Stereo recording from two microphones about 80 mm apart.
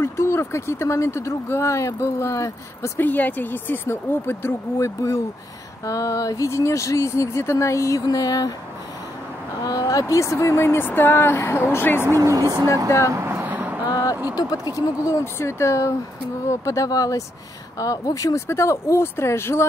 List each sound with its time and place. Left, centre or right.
0.0 s speech: left
3.0 s speech: left
4.7 s speech: left
8.1 s speech: left
9.6 s speech: left
12.1 s speech: right
13.1 s a sound: right
14.3 s speech: left
15.3 s speech: left